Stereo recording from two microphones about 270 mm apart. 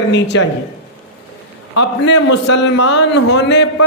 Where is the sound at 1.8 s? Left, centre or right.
Left.